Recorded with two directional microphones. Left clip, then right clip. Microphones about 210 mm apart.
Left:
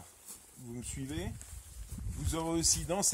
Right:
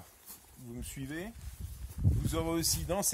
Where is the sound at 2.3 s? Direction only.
10° right (ahead or behind).